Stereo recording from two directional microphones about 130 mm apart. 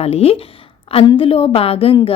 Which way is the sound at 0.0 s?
50° left (ahead or behind).